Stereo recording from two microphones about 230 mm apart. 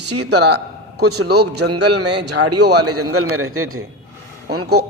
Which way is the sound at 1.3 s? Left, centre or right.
Right.